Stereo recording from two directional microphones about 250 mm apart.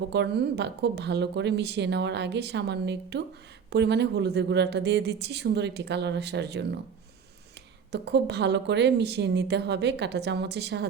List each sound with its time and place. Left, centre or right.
0.1 s a woman's voice: right
7.9 s a woman's voice: right